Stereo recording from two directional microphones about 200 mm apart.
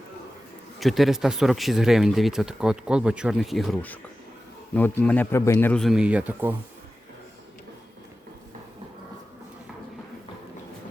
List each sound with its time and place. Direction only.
0.8 s a man's voice: centre (ahead or behind)